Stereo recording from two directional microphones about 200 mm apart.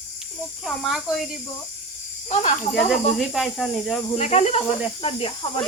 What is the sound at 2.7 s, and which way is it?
Speech, centre (ahead or behind).